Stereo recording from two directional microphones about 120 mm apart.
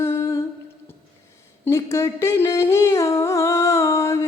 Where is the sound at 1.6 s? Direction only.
25° left (ahead or behind).